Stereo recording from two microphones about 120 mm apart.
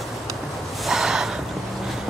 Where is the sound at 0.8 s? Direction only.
5° right (ahead or behind).